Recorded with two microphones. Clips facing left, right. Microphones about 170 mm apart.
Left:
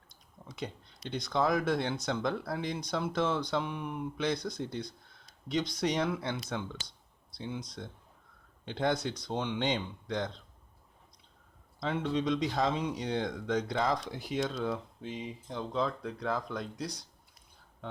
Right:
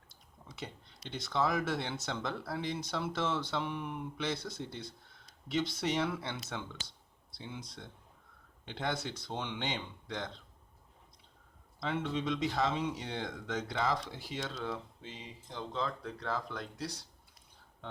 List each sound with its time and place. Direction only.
0.1 s a sound: 15° left (ahead or behind)
1.1 s speech: 15° left (ahead or behind)
11.8 s speech: 15° left (ahead or behind)